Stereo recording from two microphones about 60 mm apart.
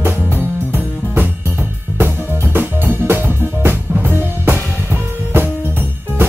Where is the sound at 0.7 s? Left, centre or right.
Right.